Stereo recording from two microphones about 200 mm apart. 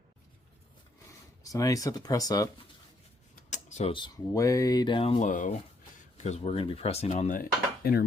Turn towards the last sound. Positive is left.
turn(degrees=45)  # may be behind; listen again after turning